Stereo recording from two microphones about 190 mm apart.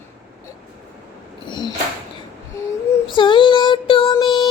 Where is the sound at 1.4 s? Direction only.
25° left (ahead or behind).